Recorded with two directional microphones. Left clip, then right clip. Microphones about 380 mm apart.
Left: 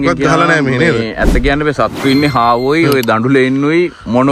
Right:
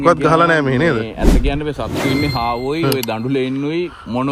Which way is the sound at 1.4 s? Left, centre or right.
Left.